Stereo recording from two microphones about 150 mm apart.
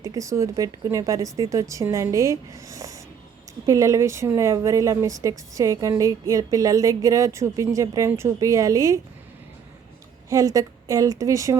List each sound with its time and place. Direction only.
0.0 s a woman's voice: 20° right (ahead or behind)
10.2 s a woman's voice: 20° right (ahead or behind)